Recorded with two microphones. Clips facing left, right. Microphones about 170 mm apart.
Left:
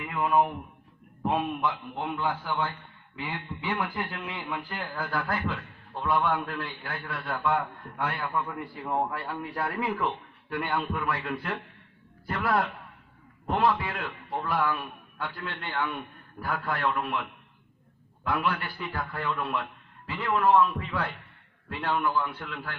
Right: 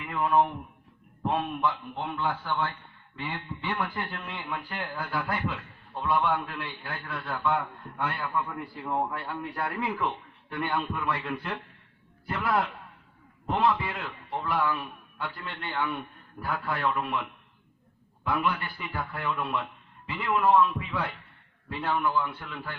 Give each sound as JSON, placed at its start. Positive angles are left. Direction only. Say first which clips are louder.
{"t": 0.0, "sound": "a man's voice", "louder": "even", "side_deg": 10}
{"t": 16.7, "sound": "a man's voice", "louder": "right 1 dB", "side_deg": -5}
{"t": 18.3, "sound": "a man's voice", "louder": "even", "side_deg": 0}